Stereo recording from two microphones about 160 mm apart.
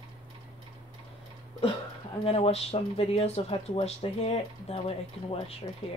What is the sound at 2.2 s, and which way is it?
Speech, 40° left (ahead or behind).